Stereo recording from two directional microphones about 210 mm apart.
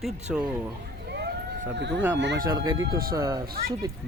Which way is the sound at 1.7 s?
55° right (ahead or behind).